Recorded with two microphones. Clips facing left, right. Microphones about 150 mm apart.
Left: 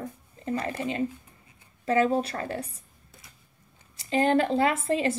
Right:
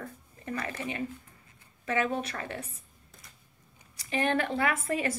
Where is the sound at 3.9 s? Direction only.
30° left (ahead or behind).